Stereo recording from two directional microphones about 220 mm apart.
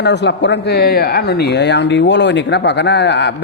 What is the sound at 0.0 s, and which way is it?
Speech, 50° left (ahead or behind).